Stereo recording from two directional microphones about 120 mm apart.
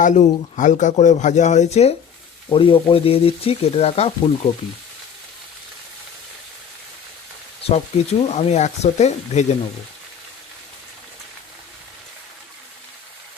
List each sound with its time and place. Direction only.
0.0 s speech: 90° left; by 1.9 s 70° left (ahead or behind)
2.5 s speech: 45° left (ahead or behind)
7.6 s speech: 55° left (ahead or behind)